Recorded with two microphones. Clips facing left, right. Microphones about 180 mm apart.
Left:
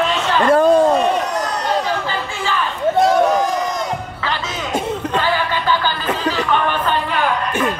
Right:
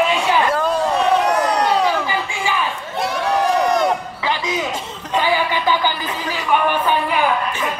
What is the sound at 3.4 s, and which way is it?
Crowd, 65° right (ahead or behind).